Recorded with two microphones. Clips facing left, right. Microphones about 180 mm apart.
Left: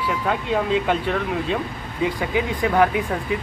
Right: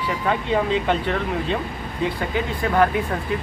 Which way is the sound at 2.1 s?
10° left (ahead or behind).